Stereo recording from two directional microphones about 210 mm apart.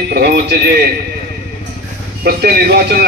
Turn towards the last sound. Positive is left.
turn(degrees=-50)  # may be behind; listen again after turning